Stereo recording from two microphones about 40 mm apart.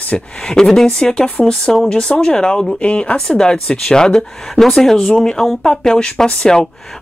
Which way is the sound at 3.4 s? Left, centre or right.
Centre.